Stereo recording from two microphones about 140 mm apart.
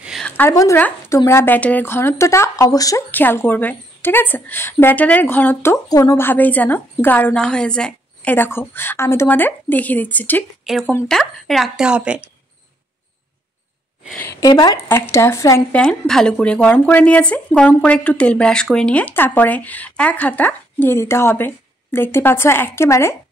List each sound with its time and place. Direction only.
0.0 s a sound: centre (ahead or behind)
0.4 s speech: 20° left (ahead or behind)
3.1 s speech: 15° left (ahead or behind)
10.6 s a sound: centre (ahead or behind)
11.1 s a woman's voice: 5° left (ahead or behind)
14.4 s speech: 30° left (ahead or behind)
15.7 s speech: 5° left (ahead or behind)